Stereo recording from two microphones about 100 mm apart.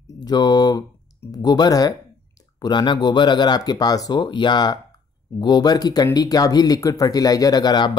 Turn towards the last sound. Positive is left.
turn(degrees=45)  # may be behind; listen again after turning